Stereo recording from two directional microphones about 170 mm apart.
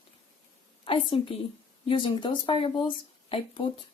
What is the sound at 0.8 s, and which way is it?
A woman's voice, 30° left (ahead or behind).